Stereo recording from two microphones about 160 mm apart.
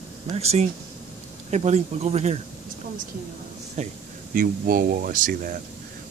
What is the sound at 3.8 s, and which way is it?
Speech, 45° right (ahead or behind).